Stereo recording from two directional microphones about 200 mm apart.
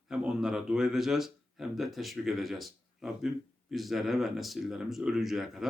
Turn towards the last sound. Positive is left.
turn(degrees=0)  # may be behind; listen again after turning